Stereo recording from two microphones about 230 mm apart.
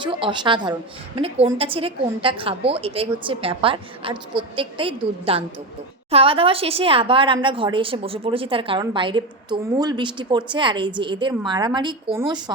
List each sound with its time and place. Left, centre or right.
0.0 s a woman's voice: right